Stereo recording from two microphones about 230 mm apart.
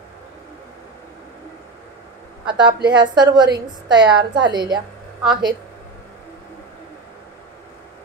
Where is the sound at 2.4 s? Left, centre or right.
Centre.